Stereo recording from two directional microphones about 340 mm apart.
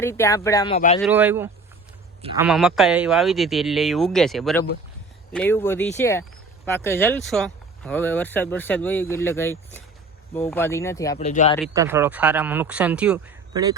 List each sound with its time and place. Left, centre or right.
0.0 s speech: centre
0.9 s speech: centre
11.3 s speech: left
11.7 s speech: centre